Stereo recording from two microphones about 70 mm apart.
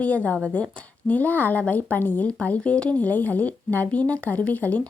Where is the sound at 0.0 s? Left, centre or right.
Centre.